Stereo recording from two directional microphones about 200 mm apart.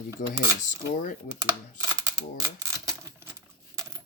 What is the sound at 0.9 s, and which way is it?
Speech, 40° left (ahead or behind).